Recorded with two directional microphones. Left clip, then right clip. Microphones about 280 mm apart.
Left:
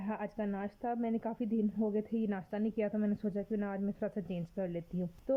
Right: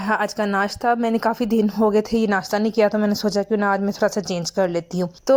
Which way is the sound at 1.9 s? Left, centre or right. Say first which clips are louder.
Right 17 dB; right.